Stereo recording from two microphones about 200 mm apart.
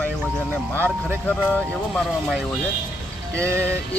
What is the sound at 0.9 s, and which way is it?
Music, 5° right (ahead or behind).